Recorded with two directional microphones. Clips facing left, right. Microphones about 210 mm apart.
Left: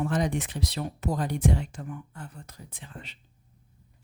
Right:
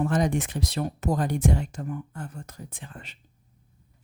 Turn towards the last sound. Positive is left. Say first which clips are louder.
# right 1 dB
turn(degrees=-50)  # may be behind; listen again after turning